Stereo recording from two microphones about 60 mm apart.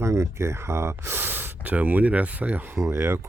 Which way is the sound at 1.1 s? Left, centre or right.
Right.